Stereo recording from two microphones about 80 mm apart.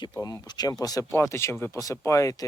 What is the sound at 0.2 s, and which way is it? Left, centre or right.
Speech, left.